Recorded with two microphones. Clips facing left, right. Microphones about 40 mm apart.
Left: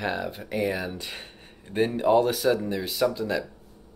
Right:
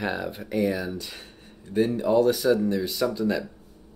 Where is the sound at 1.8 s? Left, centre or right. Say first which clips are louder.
Even; left.